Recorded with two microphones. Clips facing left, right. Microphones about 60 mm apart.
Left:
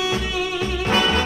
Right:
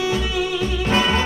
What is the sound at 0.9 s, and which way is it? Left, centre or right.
Music, right.